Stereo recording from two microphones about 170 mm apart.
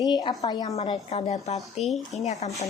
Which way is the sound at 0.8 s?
40° left (ahead or behind).